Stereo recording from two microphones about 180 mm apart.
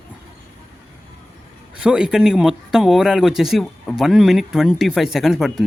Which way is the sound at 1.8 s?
5° right (ahead or behind).